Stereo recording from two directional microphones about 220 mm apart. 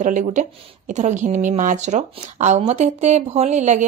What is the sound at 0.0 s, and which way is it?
Speech, 35° right (ahead or behind).